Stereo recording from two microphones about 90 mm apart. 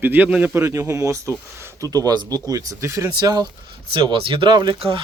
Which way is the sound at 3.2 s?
50° right (ahead or behind).